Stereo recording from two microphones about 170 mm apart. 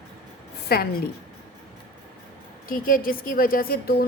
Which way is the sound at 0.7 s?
65° left (ahead or behind).